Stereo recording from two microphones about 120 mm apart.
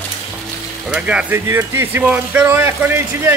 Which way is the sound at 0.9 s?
10° right (ahead or behind).